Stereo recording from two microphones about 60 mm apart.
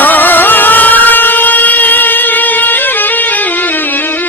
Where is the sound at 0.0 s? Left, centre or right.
Left.